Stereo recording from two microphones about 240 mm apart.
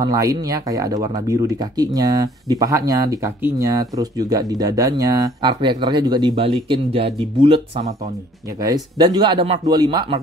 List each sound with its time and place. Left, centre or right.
0.0 s speech: centre